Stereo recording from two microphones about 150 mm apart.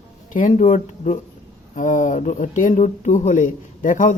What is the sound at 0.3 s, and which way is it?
Speech, 55° left (ahead or behind).